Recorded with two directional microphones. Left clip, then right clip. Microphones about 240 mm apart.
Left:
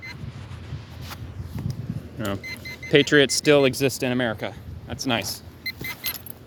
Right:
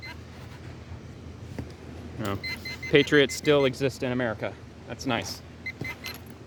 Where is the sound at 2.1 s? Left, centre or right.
Centre.